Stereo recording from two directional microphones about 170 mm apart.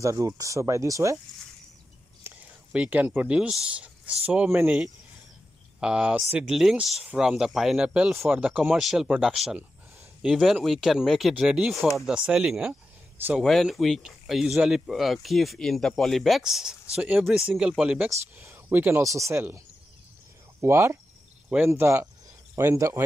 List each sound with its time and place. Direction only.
0.0 s speech: 20° right (ahead or behind)
2.2 s speech: 10° right (ahead or behind)
20.6 s speech: 15° right (ahead or behind)